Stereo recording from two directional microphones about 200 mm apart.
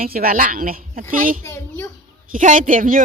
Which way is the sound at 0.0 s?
45° right (ahead or behind).